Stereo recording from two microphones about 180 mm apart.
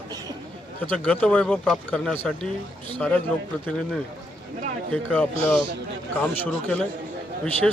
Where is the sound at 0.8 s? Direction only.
10° left (ahead or behind).